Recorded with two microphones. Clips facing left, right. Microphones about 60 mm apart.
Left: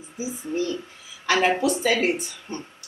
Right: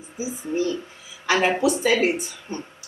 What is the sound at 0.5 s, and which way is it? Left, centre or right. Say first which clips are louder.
Speech: right 3 dB; centre.